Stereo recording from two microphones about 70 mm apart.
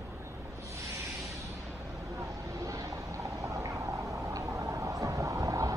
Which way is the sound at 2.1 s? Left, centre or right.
Right.